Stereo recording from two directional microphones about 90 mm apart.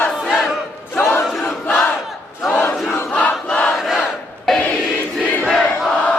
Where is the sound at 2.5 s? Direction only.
20° left (ahead or behind).